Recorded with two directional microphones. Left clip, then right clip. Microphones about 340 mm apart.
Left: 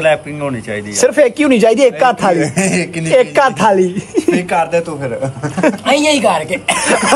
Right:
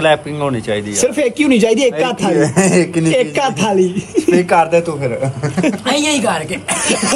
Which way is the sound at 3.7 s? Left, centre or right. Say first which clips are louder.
Left 1 dB; centre.